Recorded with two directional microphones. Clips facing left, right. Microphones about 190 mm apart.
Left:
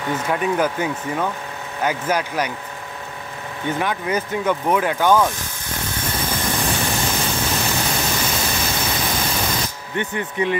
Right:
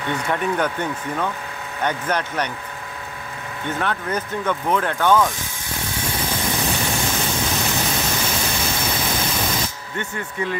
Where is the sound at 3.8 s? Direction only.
10° left (ahead or behind).